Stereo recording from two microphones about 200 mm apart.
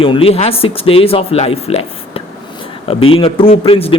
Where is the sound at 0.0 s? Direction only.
25° left (ahead or behind).